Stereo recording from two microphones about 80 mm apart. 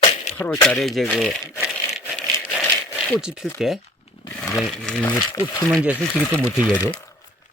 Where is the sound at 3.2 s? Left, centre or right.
Centre.